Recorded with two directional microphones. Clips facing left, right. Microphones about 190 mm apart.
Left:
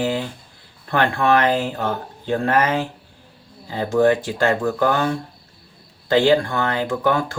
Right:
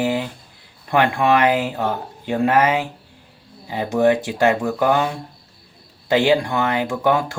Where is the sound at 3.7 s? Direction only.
20° right (ahead or behind).